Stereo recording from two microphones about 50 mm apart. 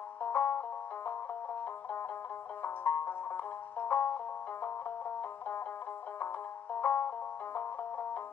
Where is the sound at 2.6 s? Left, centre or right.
Left.